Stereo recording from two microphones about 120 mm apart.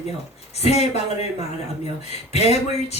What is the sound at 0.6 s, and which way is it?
Speech, 60° left (ahead or behind).